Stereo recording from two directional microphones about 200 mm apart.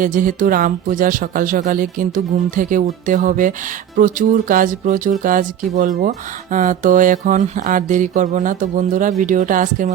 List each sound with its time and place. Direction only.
0.0 s speech: 45° right (ahead or behind)